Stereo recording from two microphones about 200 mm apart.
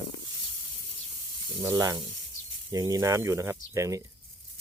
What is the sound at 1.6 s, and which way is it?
Speech, 20° right (ahead or behind).